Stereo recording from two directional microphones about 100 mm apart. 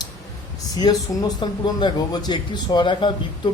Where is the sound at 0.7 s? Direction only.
40° left (ahead or behind).